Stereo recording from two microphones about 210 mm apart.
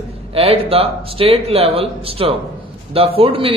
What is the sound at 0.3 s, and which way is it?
A man's voice, 30° right (ahead or behind).